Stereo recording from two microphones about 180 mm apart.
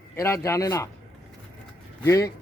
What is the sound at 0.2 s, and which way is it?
Speech, 15° left (ahead or behind).